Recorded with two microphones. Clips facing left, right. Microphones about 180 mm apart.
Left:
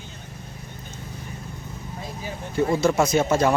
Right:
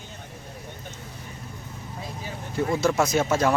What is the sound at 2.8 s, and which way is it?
Speech, centre (ahead or behind).